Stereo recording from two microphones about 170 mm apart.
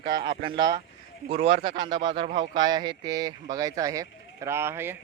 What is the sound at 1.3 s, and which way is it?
Speech, 35° right (ahead or behind).